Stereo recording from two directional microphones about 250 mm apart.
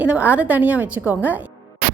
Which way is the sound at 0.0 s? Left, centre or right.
Centre.